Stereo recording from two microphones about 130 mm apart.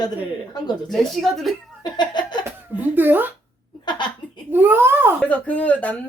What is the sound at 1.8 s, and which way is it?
Laughter, 35° left (ahead or behind).